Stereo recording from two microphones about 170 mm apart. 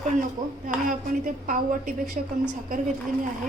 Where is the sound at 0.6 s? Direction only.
50° right (ahead or behind).